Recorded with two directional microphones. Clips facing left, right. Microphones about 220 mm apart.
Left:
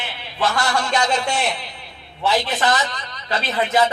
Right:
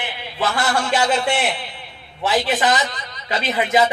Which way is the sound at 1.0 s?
5° right (ahead or behind).